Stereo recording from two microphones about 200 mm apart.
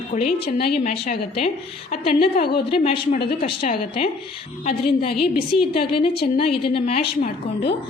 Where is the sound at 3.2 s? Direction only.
50° left (ahead or behind).